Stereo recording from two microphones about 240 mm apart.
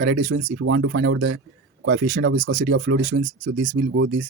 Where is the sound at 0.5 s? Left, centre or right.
Right.